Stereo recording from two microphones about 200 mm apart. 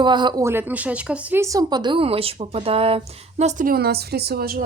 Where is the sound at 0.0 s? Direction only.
20° right (ahead or behind).